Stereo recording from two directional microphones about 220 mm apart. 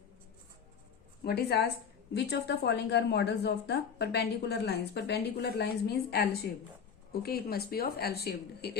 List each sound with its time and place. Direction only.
1.2 s a woman's voice: 45° left (ahead or behind)